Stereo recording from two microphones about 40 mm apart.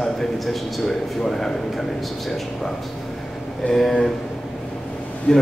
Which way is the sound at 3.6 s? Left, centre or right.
Left.